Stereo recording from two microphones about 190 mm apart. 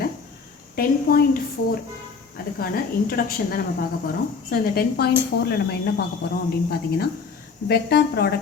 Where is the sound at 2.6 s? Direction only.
50° left (ahead or behind).